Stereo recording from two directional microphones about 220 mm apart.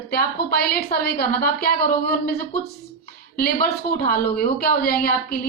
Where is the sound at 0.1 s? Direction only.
45° left (ahead or behind).